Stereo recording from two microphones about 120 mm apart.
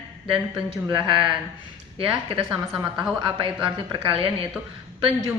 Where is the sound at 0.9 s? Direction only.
45° right (ahead or behind).